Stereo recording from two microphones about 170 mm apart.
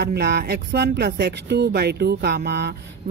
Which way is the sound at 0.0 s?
75° right (ahead or behind).